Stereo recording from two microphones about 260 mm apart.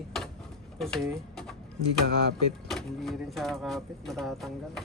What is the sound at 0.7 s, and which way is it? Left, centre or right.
Speech, centre.